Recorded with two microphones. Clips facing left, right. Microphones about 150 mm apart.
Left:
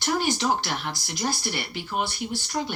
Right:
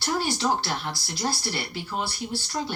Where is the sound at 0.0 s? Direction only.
15° left (ahead or behind).